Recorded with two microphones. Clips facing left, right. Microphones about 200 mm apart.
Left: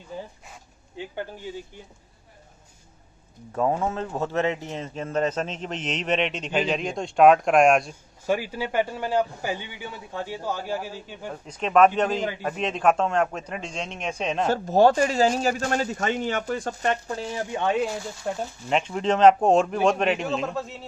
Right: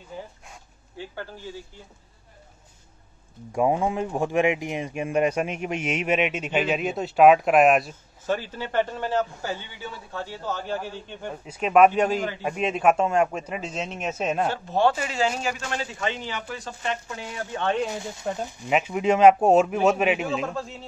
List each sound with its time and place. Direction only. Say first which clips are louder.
0.9 s a man's voice: left 3 dB; 15° left (ahead or behind)
3.5 s speech: right 2 dB; 15° right (ahead or behind)
8.3 s a man's voice: left 2 dB; 10° left (ahead or behind)
11.4 s speech: right 1 dB; 10° right (ahead or behind)
14.5 s speech: left 4 dB; 40° left (ahead or behind)
17.1 s speech: left 4 dB; 30° left (ahead or behind)
17.5 s speech: even; 10° left (ahead or behind)